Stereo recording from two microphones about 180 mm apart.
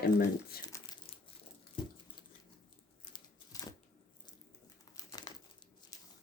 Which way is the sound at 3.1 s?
20° left (ahead or behind).